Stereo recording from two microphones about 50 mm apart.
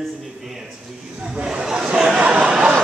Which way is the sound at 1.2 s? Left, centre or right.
Centre.